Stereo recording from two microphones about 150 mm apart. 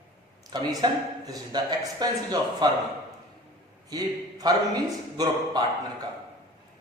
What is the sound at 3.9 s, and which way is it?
A man's voice, 25° right (ahead or behind).